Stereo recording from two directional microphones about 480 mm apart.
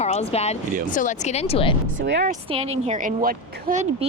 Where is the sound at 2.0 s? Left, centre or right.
Right.